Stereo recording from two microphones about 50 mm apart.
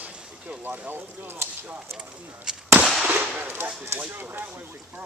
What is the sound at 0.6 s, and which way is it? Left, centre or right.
Speech, right.